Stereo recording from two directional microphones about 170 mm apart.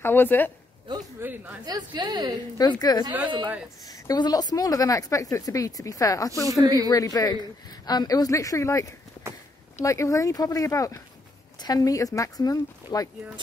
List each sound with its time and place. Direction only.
0.0 s a woman's voice: 10° left (ahead or behind)
1.2 s speech: 10° right (ahead or behind)
1.7 s speech: 25° right (ahead or behind)
2.5 s speech: 25° left (ahead or behind)
4.1 s speech: 20° left (ahead or behind)
6.6 s speech: 20° right (ahead or behind)
6.9 s speech: 20° left (ahead or behind)
9.8 s speech: 20° left (ahead or behind)